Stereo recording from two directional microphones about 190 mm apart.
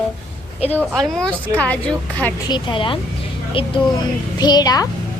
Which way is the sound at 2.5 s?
25° left (ahead or behind).